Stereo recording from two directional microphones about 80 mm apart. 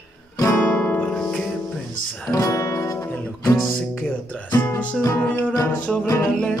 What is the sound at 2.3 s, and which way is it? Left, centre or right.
Music, left.